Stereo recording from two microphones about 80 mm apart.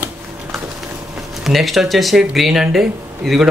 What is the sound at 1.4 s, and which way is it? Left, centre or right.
A man's voice, centre.